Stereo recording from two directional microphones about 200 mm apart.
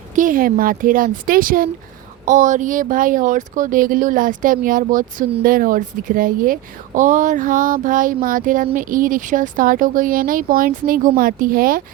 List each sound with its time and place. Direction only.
0.2 s speech: 45° right (ahead or behind)